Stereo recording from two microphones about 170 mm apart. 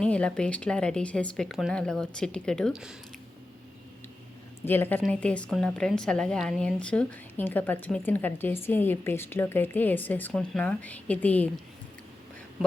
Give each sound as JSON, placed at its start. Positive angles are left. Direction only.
{"t": 0.0, "sound": "speech", "side_deg": 5}
{"t": 4.6, "sound": "a woman's voice", "side_deg": 10}